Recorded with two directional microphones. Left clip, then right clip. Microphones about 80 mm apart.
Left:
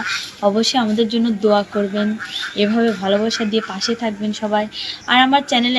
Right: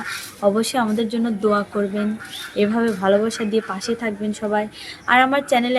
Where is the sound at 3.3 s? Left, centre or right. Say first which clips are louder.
Left 2 dB; right.